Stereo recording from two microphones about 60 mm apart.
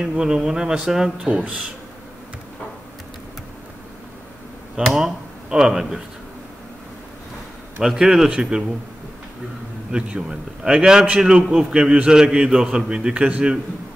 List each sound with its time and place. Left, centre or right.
0.0 s a man's voice: centre
1.3 s speech: right
4.9 s speech: centre
7.8 s a man's voice: centre
9.8 s a man's voice: centre